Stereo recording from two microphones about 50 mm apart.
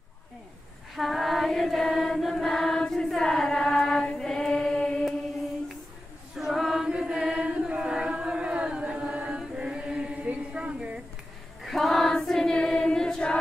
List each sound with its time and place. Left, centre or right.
0.9 s choir: centre
6.3 s choir: centre
6.9 s chant: centre
10.2 s a sound: right
11.6 s choir: centre